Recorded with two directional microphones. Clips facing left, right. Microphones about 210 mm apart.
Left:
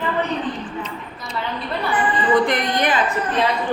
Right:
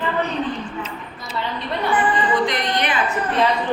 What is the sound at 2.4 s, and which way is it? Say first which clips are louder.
Speech: left 1 dB; 55° left (ahead or behind).